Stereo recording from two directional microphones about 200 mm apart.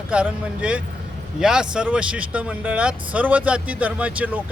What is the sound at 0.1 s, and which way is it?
Speech, 5° right (ahead or behind).